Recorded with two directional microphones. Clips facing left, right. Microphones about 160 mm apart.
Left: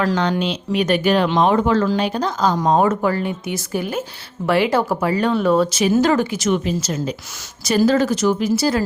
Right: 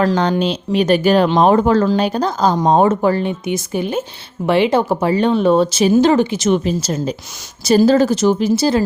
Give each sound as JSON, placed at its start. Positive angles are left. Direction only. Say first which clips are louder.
{"t": 0.0, "sound": "speech", "louder": "right 4 dB", "side_deg": -30}